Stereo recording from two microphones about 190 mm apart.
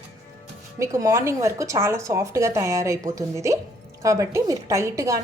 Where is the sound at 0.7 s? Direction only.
15° right (ahead or behind).